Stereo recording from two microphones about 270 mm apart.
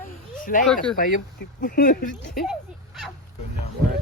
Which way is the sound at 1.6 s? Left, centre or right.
Left.